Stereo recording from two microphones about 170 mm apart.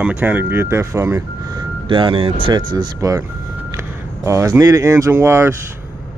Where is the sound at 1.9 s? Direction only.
30° right (ahead or behind).